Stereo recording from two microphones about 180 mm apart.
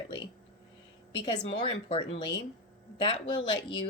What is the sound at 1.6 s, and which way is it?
Speech, 30° left (ahead or behind).